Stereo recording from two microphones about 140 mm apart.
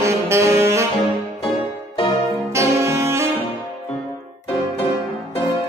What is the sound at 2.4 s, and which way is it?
Saxophone, 20° right (ahead or behind).